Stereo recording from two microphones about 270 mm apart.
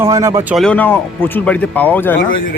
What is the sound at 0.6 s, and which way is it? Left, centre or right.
Speech, centre.